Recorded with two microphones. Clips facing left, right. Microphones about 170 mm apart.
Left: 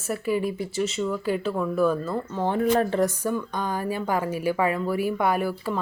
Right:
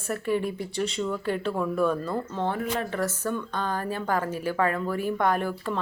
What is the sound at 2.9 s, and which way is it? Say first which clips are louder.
Speech: left 6 dB; 30° left (ahead or behind).